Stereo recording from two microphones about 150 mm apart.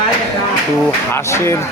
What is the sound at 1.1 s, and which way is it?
Speech, 20° left (ahead or behind).